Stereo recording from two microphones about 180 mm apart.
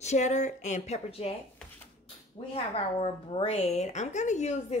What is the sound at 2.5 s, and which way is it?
A woman's voice, 35° left (ahead or behind).